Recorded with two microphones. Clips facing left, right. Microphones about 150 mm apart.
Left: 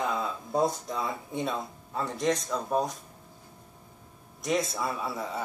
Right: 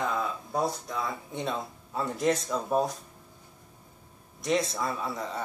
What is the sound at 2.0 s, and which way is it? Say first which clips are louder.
Speech: right 1 dB; 5° right (ahead or behind).